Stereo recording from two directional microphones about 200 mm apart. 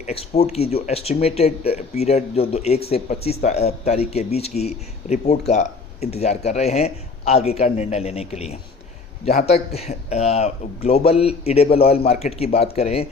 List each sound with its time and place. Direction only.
0.0 s speech: 30° left (ahead or behind)